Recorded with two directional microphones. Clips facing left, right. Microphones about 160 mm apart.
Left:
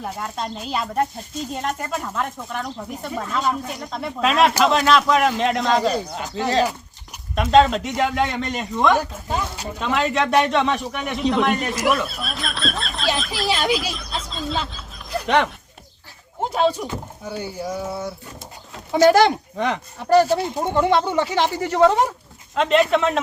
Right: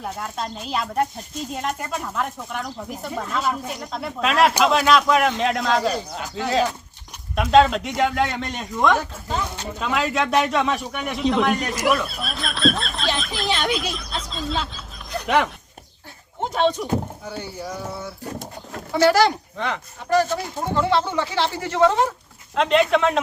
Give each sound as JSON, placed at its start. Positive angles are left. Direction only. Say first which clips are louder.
{"t": 0.0, "sound": "a man's voice", "louder": "left 1 dB", "side_deg": 0}
{"t": 9.8, "sound": "a man's voice", "louder": "left 2 dB", "side_deg": 0}
{"t": 15.1, "sound": "a sound", "louder": "left 1 dB", "side_deg": 0}
{"t": 16.4, "sound": "speech", "louder": "left 1 dB", "side_deg": 5}
{"t": 18.9, "sound": "speech", "louder": "left 3 dB", "side_deg": 20}
{"t": 20.1, "sound": "speech", "louder": "left 4 dB", "side_deg": 35}
{"t": 20.7, "sound": "speech", "louder": "left 2 dB", "side_deg": 15}
{"t": 22.5, "sound": "a man's voice", "louder": "left 1 dB", "side_deg": 0}